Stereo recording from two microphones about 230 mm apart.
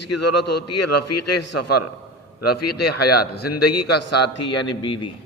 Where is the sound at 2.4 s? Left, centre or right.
Left.